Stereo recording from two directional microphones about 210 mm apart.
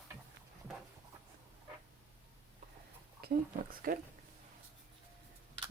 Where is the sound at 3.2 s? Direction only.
45° right (ahead or behind).